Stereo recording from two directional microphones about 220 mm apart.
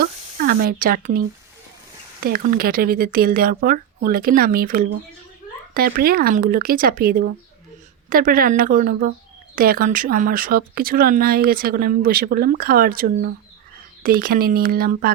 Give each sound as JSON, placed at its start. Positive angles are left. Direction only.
{"t": 0.0, "sound": "speech", "side_deg": -40}
{"t": 2.2, "sound": "speech", "side_deg": -40}